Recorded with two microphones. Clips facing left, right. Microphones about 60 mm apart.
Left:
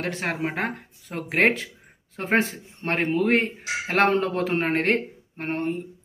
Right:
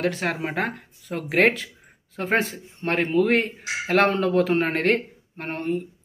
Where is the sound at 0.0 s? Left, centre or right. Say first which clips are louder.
Right 2 dB; left.